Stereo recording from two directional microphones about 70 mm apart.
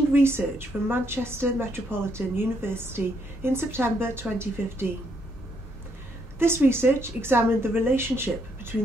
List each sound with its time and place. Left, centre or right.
0.1 s a woman's voice: right
6.4 s a woman's voice: right